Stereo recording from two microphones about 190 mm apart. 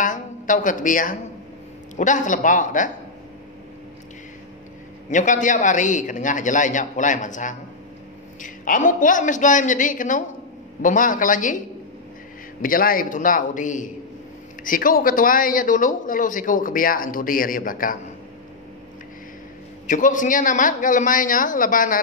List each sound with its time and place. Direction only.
0.0 s a woman's voice: 45° left (ahead or behind)
5.1 s a man's voice: 40° left (ahead or behind)
12.6 s a man's voice: 50° left (ahead or behind)
19.9 s a man's voice: 40° left (ahead or behind)